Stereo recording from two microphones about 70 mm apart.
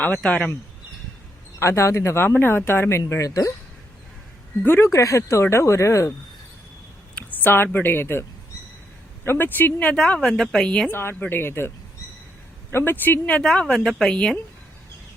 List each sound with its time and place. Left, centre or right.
0.2 s a woman's voice: centre
1.5 s speech: left
3.1 s speech: left
4.6 s speech: left
4.9 s speech: left
7.2 s speech: left
9.2 s speech: left
9.9 s a woman's voice: centre
10.9 s speech: left
12.7 s speech: left
13.6 s a woman's voice: centre